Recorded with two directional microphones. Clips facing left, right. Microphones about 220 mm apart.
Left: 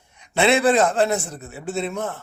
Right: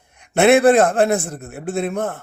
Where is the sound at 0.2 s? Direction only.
55° right (ahead or behind).